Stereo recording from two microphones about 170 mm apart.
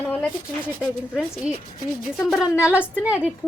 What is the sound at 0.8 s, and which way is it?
Speech, 5° right (ahead or behind).